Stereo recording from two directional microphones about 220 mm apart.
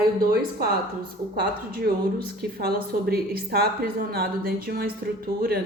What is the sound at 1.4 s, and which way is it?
Speech, 45° right (ahead or behind).